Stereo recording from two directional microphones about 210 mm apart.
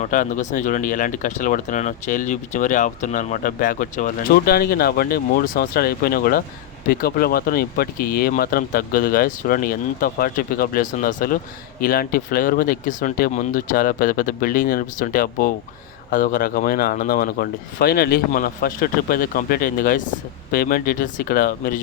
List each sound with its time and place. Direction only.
0.0 s speech: 40° left (ahead or behind)